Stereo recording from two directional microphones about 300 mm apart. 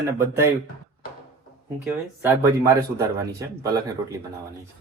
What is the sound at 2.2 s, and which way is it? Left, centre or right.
A man's voice, centre.